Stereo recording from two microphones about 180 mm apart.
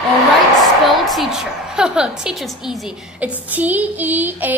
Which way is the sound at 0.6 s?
Centre (ahead or behind).